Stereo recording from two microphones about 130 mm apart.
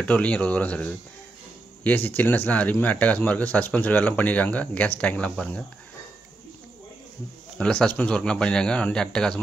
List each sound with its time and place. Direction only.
0.0 s speech: 10° left (ahead or behind)
7.5 s speech: 5° left (ahead or behind)